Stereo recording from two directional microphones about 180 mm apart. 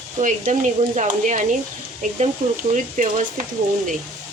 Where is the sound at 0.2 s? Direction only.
45° right (ahead or behind).